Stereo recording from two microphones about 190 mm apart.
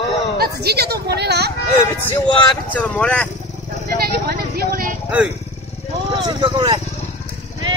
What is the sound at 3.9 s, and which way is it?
Vehicle, 55° right (ahead or behind).